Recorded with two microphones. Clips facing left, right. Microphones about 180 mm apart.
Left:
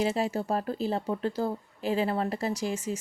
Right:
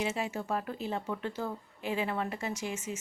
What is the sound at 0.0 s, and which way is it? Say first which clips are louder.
Speech: left 6 dB; 35° left (ahead or behind).